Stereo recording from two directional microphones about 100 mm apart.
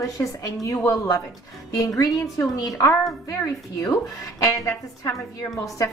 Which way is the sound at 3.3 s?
30° left (ahead or behind).